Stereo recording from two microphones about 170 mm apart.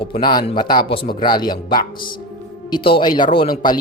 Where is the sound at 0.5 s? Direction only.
25° left (ahead or behind).